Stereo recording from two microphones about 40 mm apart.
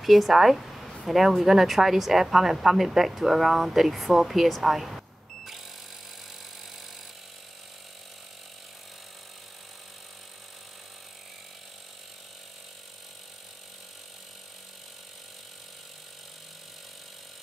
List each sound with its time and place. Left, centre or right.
0.0 s a woman's voice: centre